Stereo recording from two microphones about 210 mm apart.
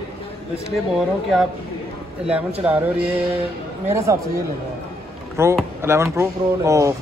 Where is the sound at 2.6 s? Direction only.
5° right (ahead or behind).